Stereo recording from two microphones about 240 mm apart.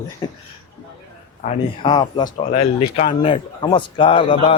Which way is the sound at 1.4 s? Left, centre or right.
Left.